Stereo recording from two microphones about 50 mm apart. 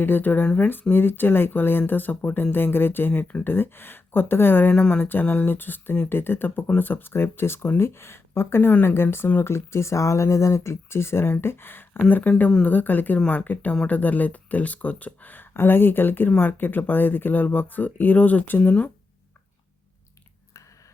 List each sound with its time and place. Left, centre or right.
0.0 s speech: left
4.7 s speech: left
15.5 s speech: left